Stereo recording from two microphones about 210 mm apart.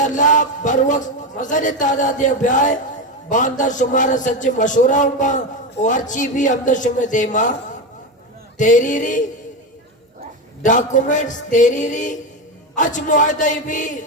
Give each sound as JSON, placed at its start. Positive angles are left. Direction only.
{"t": 0.0, "sound": "a man's voice", "side_deg": 35}
{"t": 8.5, "sound": "a man's voice", "side_deg": 35}
{"t": 10.6, "sound": "a man's voice", "side_deg": 35}